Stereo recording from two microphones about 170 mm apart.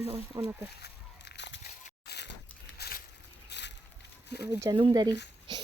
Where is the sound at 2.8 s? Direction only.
70° left (ahead or behind).